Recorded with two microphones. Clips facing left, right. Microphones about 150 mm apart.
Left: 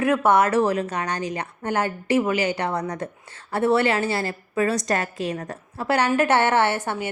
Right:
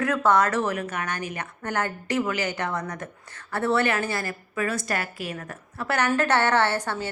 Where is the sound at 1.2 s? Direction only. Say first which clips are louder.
Left 4 dB; 25° left (ahead or behind).